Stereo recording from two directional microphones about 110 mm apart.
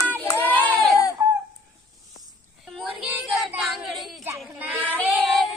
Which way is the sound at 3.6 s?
Centre (ahead or behind).